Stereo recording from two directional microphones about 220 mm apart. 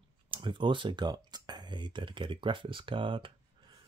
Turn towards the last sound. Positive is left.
turn(degrees=-20)  # may be behind; listen again after turning